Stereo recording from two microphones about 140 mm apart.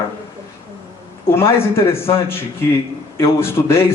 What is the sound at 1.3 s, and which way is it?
A man's voice, 20° left (ahead or behind).